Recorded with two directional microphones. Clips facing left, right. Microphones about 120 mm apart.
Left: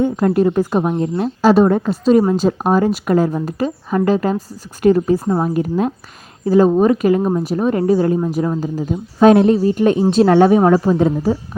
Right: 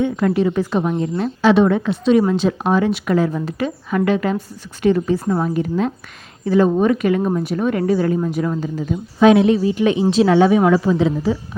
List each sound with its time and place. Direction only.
0.0 s a woman's voice: 40° left (ahead or behind)
7.2 s speech: 20° left (ahead or behind)
7.4 s a woman's voice: 35° left (ahead or behind)